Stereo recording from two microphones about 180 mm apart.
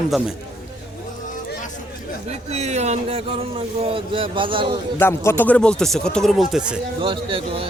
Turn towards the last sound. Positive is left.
turn(degrees=-30)  # may be behind; listen again after turning